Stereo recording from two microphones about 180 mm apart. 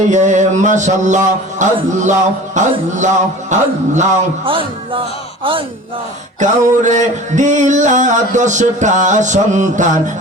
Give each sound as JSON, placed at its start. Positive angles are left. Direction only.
{"t": 0.1, "sound": "music", "side_deg": -40}
{"t": 4.4, "sound": "a man's voice", "side_deg": -30}
{"t": 6.4, "sound": "music", "side_deg": -40}